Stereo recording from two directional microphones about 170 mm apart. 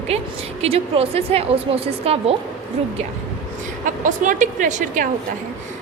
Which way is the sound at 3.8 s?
50° right (ahead or behind).